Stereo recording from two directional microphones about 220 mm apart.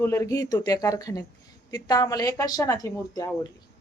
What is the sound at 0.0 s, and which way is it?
A woman's voice, 15° left (ahead or behind).